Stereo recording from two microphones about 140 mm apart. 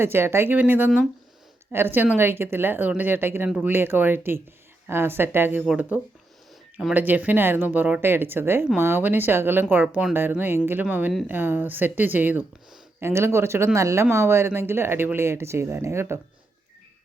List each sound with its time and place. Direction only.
0.0 s speech: 15° right (ahead or behind)